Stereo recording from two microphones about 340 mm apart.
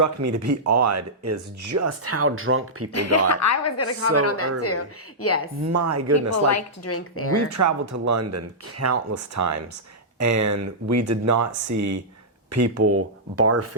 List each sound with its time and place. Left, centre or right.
0.0 s speech: right
2.9 s speech: left
5.7 s speech: right
6.3 s speech: left
7.5 s speech: right